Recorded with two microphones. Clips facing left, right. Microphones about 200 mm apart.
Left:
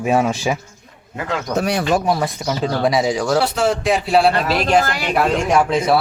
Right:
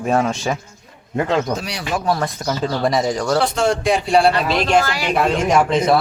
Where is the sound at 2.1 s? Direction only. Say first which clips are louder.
Left 1 dB; 10° left (ahead or behind).